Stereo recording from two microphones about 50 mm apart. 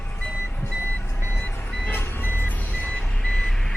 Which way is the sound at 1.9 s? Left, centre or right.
Left.